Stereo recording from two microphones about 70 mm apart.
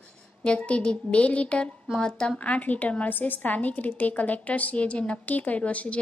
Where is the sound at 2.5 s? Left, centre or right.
Left.